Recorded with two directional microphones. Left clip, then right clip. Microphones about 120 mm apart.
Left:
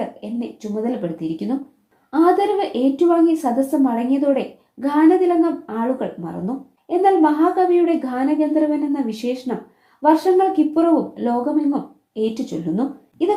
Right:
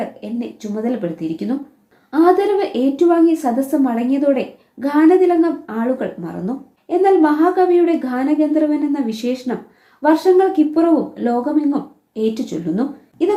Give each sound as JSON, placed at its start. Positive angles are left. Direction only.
{"t": 0.0, "sound": "speech", "side_deg": 20}